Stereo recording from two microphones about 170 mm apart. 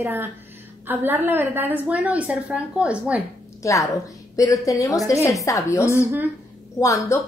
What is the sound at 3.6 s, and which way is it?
A woman's voice, 20° left (ahead or behind).